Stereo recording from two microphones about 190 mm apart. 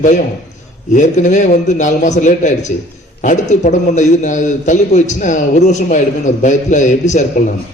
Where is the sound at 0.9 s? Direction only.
40° left (ahead or behind).